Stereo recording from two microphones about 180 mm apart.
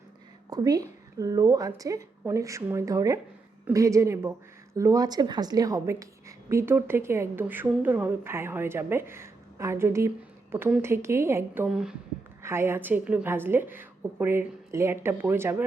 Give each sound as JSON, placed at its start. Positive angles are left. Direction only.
{"t": 0.5, "sound": "a woman's voice", "side_deg": -20}